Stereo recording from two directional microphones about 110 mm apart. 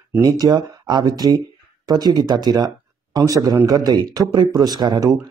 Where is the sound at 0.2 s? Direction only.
35° right (ahead or behind).